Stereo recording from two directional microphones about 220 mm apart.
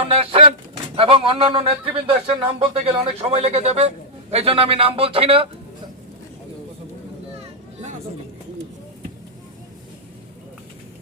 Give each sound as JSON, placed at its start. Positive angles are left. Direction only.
{"t": 0.0, "sound": "bird", "side_deg": -25}
{"t": 0.9, "sound": "a man's voice", "side_deg": -25}